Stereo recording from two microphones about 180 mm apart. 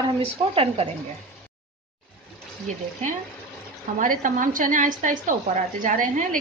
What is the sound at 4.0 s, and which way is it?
A woman's voice, 45° right (ahead or behind).